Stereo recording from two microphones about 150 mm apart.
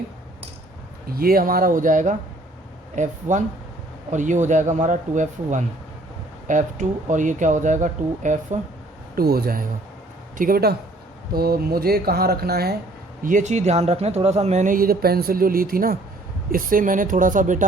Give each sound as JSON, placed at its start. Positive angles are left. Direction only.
{"t": 1.1, "sound": "speech", "side_deg": -80}
{"t": 9.1, "sound": "speech", "side_deg": -85}
{"t": 13.2, "sound": "speech", "side_deg": -55}